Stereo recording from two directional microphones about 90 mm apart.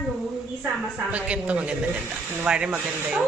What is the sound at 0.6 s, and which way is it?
A man's voice, 15° right (ahead or behind).